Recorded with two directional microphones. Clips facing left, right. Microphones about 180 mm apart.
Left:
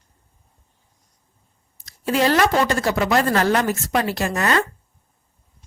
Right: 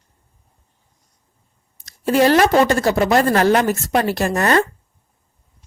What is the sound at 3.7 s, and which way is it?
Speech, 45° right (ahead or behind).